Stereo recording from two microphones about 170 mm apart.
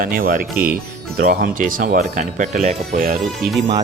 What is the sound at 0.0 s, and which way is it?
Speech, 55° right (ahead or behind).